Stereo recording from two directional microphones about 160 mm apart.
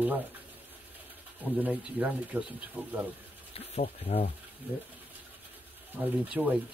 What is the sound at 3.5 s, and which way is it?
Speech, 40° left (ahead or behind).